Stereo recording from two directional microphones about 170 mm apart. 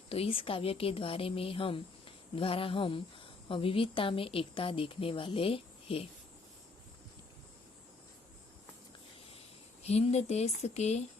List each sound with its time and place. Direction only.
0.1 s a woman's voice: 35° left (ahead or behind)
9.8 s a woman's voice: 40° left (ahead or behind)